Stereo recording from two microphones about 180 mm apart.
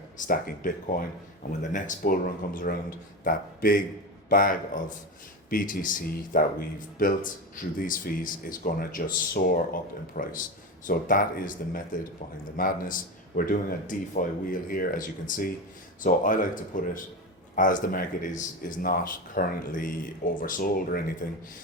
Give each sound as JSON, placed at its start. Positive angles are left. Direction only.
{"t": 0.2, "sound": "speech", "side_deg": 50}